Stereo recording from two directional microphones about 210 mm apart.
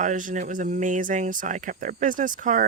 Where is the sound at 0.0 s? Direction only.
40° right (ahead or behind).